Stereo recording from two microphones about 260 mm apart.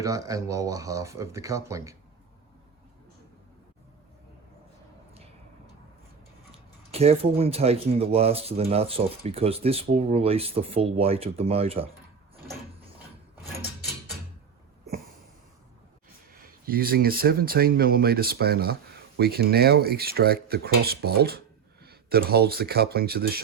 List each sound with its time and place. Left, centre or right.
0.0 s speech: centre
6.9 s speech: right
16.6 s speech: right